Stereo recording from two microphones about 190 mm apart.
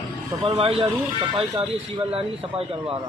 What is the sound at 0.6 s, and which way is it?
Speech, 30° right (ahead or behind).